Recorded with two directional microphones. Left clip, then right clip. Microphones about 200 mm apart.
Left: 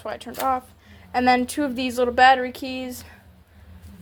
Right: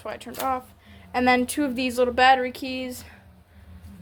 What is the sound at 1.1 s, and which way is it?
Speech, 15° right (ahead or behind).